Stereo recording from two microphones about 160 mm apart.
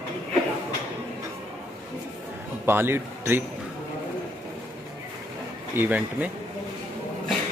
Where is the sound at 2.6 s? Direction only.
15° right (ahead or behind).